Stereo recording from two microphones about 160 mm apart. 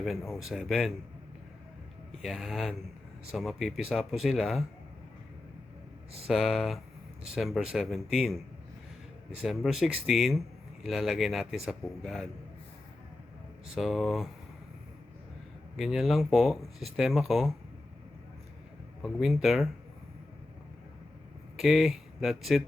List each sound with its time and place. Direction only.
0.0 s speech: centre (ahead or behind)
2.2 s speech: centre (ahead or behind)
6.2 s speech: 5° left (ahead or behind)
9.4 s speech: centre (ahead or behind)
13.7 s speech: centre (ahead or behind)
15.7 s speech: centre (ahead or behind)
19.0 s speech: centre (ahead or behind)
21.5 s speech: centre (ahead or behind)